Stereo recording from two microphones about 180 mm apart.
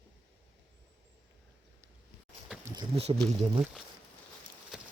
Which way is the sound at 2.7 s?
30° right (ahead or behind).